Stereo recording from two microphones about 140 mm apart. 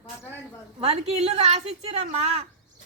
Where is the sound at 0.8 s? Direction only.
50° right (ahead or behind).